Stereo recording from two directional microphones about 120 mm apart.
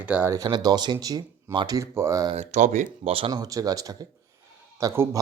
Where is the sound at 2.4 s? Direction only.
80° right.